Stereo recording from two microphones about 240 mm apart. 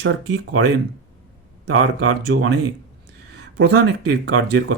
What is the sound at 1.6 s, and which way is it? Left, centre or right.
Speech, right.